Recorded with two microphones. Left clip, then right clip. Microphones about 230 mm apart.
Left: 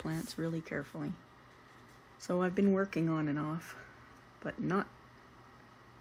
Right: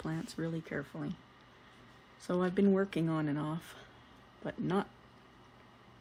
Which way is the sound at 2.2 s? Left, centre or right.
Centre.